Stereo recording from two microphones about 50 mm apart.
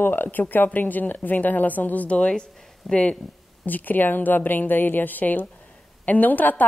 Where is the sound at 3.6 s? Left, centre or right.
Left.